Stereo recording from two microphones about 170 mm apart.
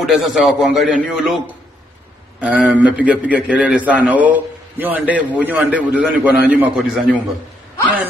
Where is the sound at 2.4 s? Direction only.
10° right (ahead or behind).